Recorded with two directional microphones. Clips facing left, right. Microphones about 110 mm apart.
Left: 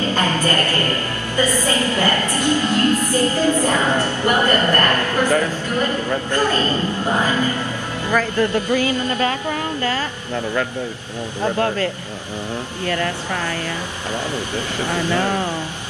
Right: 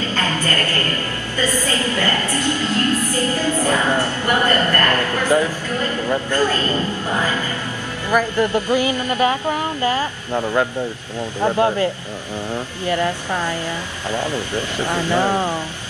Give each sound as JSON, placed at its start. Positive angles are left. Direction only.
{"t": 0.1, "sound": "a sound", "side_deg": 15}
{"t": 8.1, "sound": "a woman's voice", "side_deg": -15}
{"t": 11.4, "sound": "a woman's voice", "side_deg": -20}
{"t": 14.3, "sound": "speech", "side_deg": 15}
{"t": 14.9, "sound": "a woman's voice", "side_deg": -15}